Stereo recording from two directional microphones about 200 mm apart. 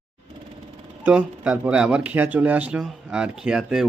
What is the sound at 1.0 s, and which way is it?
Speech, 5° right (ahead or behind).